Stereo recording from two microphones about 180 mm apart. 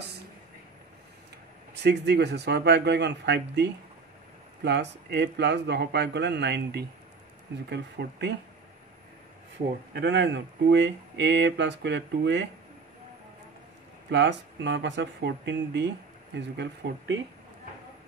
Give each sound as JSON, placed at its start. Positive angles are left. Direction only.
{"t": 1.8, "sound": "speech", "side_deg": -65}
{"t": 4.6, "sound": "speech", "side_deg": -70}
{"t": 9.9, "sound": "speech", "side_deg": -75}
{"t": 14.1, "sound": "speech", "side_deg": -80}